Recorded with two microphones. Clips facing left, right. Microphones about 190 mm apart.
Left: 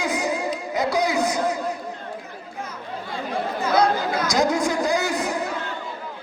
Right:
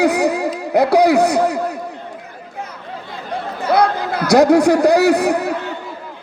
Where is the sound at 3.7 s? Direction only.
60° right (ahead or behind).